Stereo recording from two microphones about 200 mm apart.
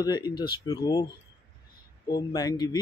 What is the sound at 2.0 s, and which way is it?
Speech, 20° left (ahead or behind).